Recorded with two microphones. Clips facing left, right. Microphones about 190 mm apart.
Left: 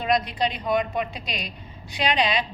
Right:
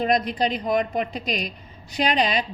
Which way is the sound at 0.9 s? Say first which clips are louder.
Right 3 dB; 45° right (ahead or behind).